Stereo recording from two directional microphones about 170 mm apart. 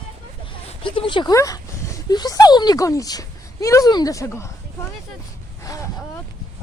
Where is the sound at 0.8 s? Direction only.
30° left (ahead or behind).